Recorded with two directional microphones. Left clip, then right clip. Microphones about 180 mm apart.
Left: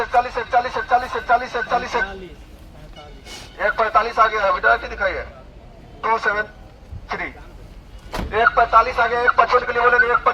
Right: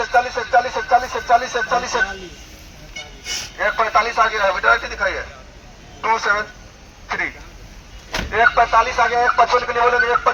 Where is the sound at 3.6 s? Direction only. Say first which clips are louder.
Even; 35° left (ahead or behind).